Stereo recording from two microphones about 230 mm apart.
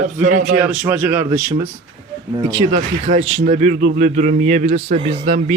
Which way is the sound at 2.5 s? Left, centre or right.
Right.